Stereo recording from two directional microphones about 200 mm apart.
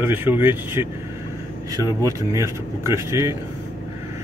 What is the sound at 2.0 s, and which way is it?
Speech, 15° right (ahead or behind).